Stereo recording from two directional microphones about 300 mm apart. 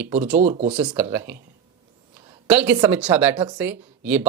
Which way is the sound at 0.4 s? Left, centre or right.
Right.